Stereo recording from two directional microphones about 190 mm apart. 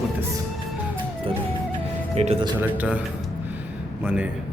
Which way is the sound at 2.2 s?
35° right (ahead or behind).